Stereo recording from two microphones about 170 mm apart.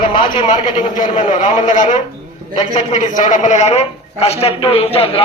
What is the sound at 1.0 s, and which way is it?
A man's voice, 45° left (ahead or behind).